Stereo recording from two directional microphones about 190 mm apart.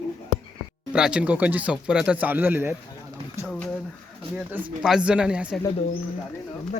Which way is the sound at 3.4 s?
5° left (ahead or behind).